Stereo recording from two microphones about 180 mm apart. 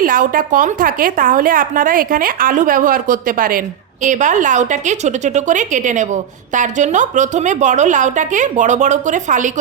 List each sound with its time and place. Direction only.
0.0 s a woman's voice: 50° right (ahead or behind)